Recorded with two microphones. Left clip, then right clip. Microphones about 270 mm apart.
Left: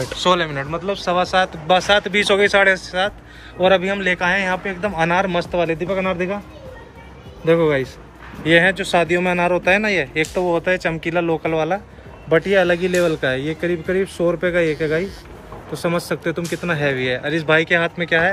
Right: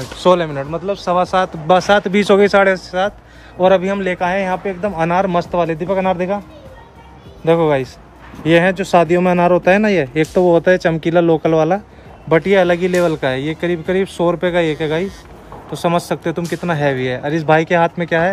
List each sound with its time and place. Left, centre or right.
0.2 s speech: right
7.4 s speech: right